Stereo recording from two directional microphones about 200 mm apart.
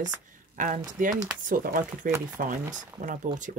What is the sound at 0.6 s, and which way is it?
Speech, 40° right (ahead or behind).